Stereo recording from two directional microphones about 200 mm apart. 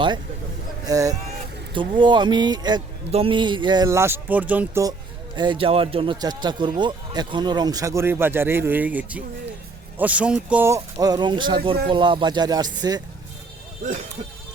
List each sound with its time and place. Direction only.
0.9 s a man's voice: 15° right (ahead or behind)